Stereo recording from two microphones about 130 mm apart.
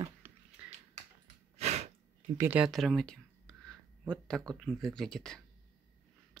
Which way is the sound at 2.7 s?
Centre (ahead or behind).